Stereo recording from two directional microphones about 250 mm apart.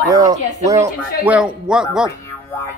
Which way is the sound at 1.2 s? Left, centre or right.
Centre.